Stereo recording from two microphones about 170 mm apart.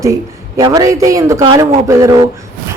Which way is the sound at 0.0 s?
20° right (ahead or behind).